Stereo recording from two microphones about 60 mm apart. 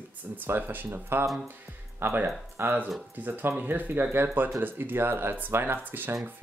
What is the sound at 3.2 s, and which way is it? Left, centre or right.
Speech, right.